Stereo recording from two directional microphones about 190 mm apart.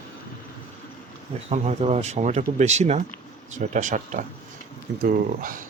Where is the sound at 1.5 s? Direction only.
35° right (ahead or behind).